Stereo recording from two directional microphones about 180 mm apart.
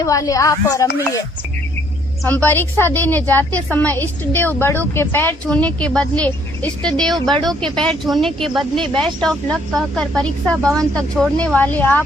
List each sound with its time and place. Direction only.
0.0 s a woman's voice: 20° left (ahead or behind)
2.2 s a woman's voice: 10° left (ahead or behind)